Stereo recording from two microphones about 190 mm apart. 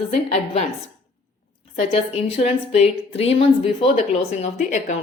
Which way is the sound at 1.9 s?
30° left (ahead or behind).